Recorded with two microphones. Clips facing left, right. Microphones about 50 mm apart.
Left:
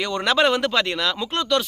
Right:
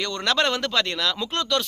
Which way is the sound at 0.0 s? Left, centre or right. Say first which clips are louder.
Left 4 dB; centre.